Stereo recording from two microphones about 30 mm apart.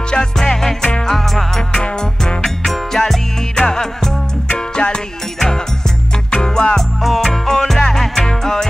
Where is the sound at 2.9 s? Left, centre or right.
Centre.